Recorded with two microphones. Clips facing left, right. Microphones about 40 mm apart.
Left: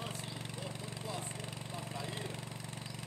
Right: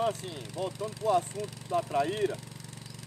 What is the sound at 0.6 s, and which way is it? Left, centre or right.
Speech, right.